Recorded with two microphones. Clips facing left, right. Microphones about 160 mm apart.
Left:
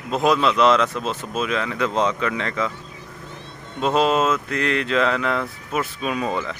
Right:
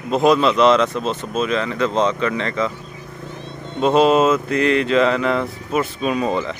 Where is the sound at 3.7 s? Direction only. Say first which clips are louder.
Right 5 dB; centre (ahead or behind).